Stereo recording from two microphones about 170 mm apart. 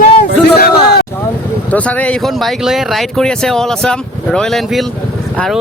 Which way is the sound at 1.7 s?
10° left (ahead or behind).